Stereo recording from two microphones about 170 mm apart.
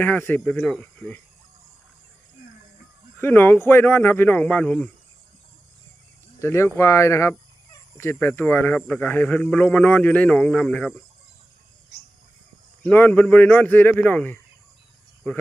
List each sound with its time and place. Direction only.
0.0 s a man's voice: 10° left (ahead or behind)
3.2 s a man's voice: 10° left (ahead or behind)
6.4 s a man's voice: 15° left (ahead or behind)
12.8 s a man's voice: 10° left (ahead or behind)